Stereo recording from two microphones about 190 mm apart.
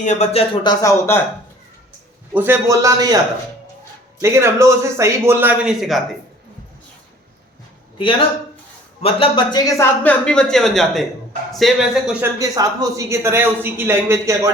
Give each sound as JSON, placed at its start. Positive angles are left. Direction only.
{"t": 0.0, "sound": "speech", "side_deg": 35}
{"t": 2.3, "sound": "a man's voice", "side_deg": -10}
{"t": 4.2, "sound": "a man's voice", "side_deg": -15}
{"t": 9.0, "sound": "speech", "side_deg": 30}
{"t": 12.2, "sound": "a man's voice", "side_deg": -20}